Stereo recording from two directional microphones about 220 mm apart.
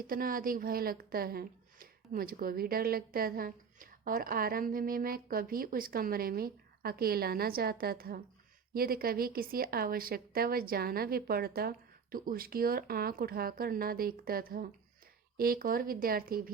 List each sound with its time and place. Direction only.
0.1 s a woman's voice: 40° right (ahead or behind)